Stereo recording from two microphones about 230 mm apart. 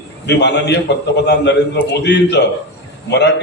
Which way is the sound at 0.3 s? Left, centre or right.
Left.